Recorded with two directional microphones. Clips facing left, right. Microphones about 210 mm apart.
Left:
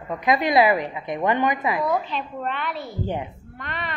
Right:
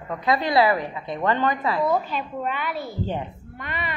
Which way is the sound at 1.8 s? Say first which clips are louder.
Right 1 dB; 5° right (ahead or behind).